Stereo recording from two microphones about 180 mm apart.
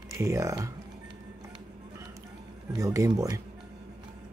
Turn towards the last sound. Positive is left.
turn(degrees=-20)  # may be behind; listen again after turning